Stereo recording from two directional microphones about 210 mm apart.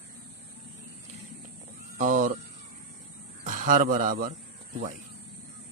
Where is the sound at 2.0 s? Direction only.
40° right (ahead or behind).